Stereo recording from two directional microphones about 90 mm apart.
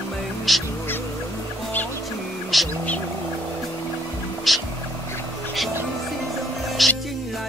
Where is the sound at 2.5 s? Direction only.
Centre (ahead or behind).